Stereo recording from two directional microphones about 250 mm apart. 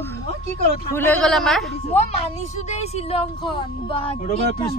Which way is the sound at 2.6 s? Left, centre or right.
Left.